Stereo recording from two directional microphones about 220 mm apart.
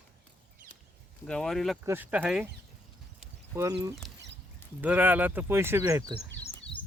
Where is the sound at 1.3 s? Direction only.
Centre (ahead or behind).